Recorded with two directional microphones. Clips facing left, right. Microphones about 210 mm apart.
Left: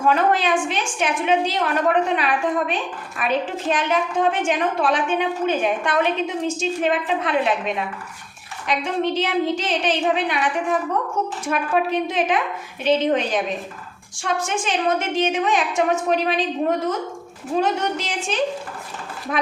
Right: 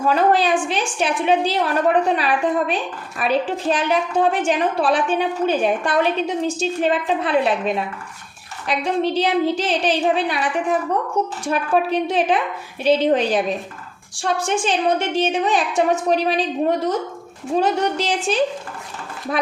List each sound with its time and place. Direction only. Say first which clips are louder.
0.0 s a woman's voice: right 2 dB; 35° right (ahead or behind)
8.6 s a woman's voice: right 2 dB; 35° right (ahead or behind)
17.6 s a woman's voice: right 3 dB; 35° right (ahead or behind)